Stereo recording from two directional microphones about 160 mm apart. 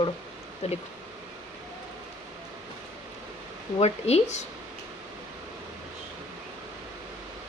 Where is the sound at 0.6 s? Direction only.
45° left (ahead or behind).